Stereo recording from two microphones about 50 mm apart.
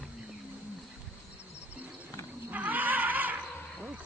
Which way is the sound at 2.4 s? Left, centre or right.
Right.